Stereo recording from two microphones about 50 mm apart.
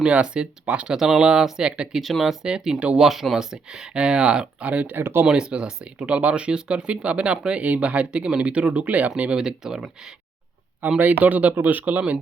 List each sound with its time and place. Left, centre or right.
0.0 s speech: right
0.9 s speech: centre
2.0 s speech: centre
2.5 s speech: centre
3.0 s speech: centre
4.6 s speech: right
4.9 s speech: right
5.2 s speech: centre
10.8 s speech: right